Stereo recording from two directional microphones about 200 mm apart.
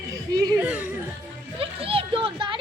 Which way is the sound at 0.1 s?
15° right (ahead or behind).